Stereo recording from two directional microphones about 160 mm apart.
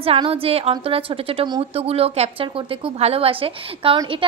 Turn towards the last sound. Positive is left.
turn(degrees=-35)  # may be behind; listen again after turning